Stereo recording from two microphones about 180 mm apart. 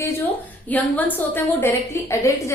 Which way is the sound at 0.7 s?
10° left (ahead or behind).